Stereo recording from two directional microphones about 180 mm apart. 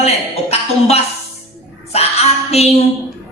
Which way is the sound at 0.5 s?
35° left (ahead or behind).